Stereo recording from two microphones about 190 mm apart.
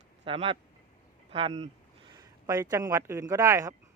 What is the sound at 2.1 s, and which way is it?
Speech, 20° right (ahead or behind).